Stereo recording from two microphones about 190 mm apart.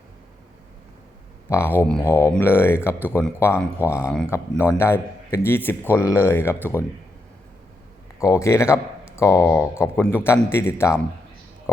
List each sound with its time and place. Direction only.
1.5 s speech: 15° left (ahead or behind)
8.2 s speech: 15° left (ahead or behind)